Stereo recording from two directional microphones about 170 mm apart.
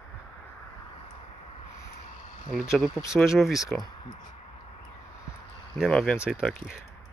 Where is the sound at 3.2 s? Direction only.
Centre (ahead or behind).